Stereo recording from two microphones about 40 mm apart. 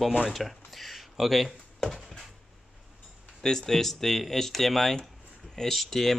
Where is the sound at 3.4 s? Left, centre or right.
Centre.